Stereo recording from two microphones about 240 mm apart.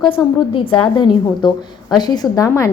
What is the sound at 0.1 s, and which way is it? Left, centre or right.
A woman's voice, left.